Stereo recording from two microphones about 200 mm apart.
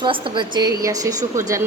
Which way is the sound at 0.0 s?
25° right (ahead or behind).